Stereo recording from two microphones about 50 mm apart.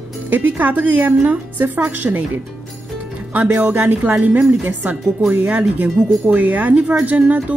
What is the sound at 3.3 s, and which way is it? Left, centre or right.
A woman's voice, right.